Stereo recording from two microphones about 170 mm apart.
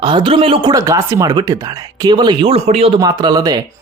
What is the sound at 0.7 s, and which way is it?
Speech, 20° right (ahead or behind).